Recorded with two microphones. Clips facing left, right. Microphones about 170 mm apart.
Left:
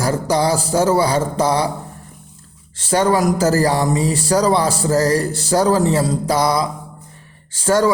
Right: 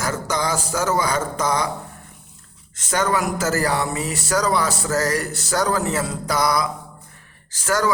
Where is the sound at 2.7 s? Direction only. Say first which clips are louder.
Left 6 dB; 30° left (ahead or behind).